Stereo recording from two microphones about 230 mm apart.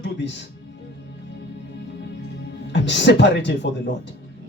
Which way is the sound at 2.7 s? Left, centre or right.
Left.